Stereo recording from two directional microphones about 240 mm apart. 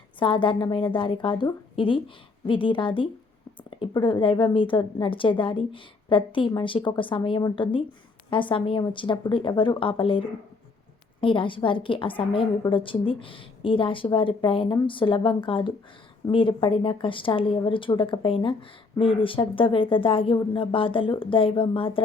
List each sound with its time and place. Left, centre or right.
0.2 s a woman's voice: left